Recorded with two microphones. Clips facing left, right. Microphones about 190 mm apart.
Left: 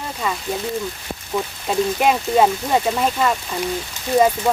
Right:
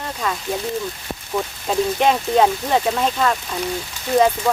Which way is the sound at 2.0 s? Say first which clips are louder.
Even; 5° left (ahead or behind).